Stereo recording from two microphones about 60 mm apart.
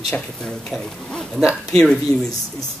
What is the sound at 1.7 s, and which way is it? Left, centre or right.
Speech, centre.